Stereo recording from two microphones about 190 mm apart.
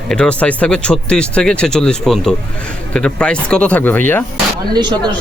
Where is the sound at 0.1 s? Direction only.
5° left (ahead or behind).